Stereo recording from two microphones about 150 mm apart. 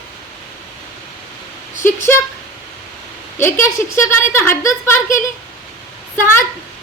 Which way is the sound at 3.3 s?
15° left (ahead or behind).